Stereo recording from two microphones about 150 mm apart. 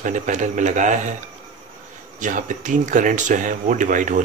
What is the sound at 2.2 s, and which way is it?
Speech, 60° right (ahead or behind).